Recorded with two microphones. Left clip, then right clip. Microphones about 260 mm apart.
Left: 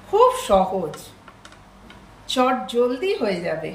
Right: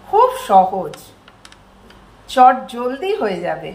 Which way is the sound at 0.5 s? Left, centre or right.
Centre.